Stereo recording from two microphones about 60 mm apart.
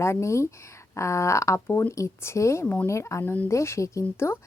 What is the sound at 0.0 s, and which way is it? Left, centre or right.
Speech, left.